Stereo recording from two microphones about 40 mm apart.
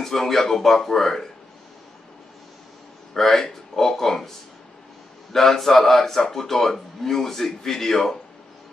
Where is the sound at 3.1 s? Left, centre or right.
Centre.